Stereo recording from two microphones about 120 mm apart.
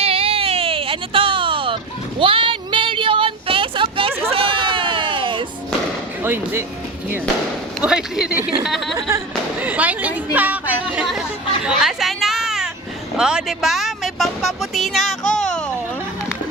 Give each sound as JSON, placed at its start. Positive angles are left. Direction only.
{"t": 0.0, "sound": "baby cry", "side_deg": -50}
{"t": 4.3, "sound": "sheep", "side_deg": -50}
{"t": 6.2, "sound": "speech", "side_deg": -20}
{"t": 7.8, "sound": "speech", "side_deg": -5}
{"t": 9.0, "sound": "speech", "side_deg": -25}
{"t": 9.6, "sound": "a sound", "side_deg": -15}
{"t": 11.6, "sound": "a sound", "side_deg": -5}
{"t": 13.1, "sound": "speech", "side_deg": -5}